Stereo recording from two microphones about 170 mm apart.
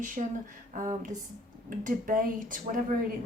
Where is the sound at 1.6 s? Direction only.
55° right (ahead or behind).